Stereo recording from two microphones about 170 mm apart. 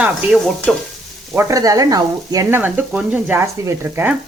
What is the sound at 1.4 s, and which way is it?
Speech, 20° right (ahead or behind).